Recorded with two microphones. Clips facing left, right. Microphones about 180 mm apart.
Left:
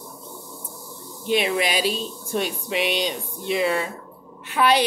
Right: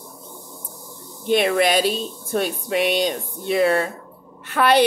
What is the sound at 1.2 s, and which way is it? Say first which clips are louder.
Speech: right 4 dB; 55° right (ahead or behind).